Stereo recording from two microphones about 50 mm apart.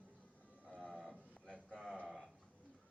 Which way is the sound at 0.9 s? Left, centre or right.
Centre.